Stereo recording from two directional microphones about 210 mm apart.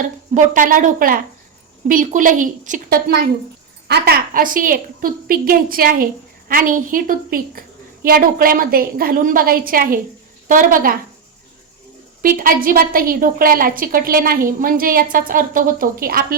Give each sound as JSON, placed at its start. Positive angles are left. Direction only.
{"t": 0.3, "sound": "a woman's voice", "side_deg": -40}
{"t": 12.2, "sound": "a woman's voice", "side_deg": -40}